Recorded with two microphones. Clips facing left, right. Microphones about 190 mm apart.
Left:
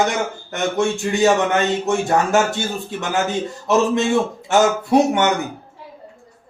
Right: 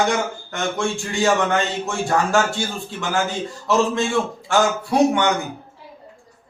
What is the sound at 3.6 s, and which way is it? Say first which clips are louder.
Speech: left 2 dB; 20° left (ahead or behind).